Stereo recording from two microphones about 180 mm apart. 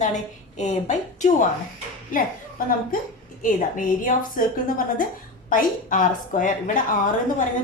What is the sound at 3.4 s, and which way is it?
A woman's voice, 45° left (ahead or behind).